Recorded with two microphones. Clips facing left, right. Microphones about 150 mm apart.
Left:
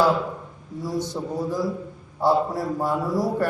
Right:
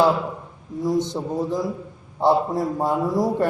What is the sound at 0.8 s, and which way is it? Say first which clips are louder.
A man's voice: right 5 dB; 20° right (ahead or behind).